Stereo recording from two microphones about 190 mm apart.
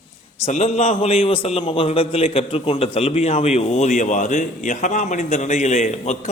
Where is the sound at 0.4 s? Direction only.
35° left (ahead or behind).